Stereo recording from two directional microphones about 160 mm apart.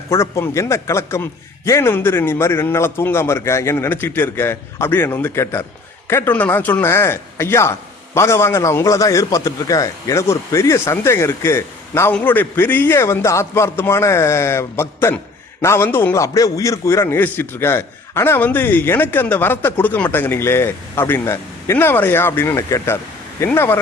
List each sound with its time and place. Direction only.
0.1 s speech: 15° left (ahead or behind)